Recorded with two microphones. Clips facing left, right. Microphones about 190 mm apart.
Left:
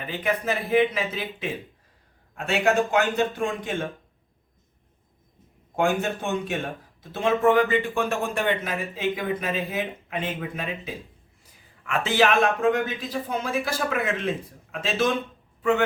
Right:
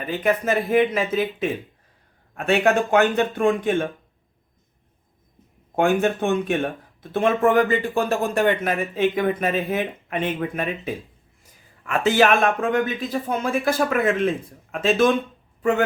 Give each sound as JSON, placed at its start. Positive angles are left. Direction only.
{"t": 0.1, "sound": "speech", "side_deg": -45}
{"t": 2.3, "sound": "speech", "side_deg": -60}
{"t": 5.7, "sound": "speech", "side_deg": -60}